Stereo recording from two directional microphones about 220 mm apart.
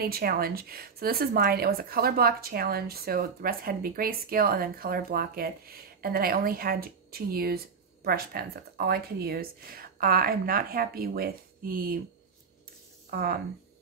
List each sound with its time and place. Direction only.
0.0 s speech: 45° right (ahead or behind)
13.1 s speech: 45° right (ahead or behind)